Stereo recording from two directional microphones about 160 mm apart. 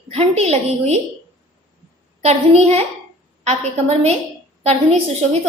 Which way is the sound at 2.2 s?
40° right (ahead or behind).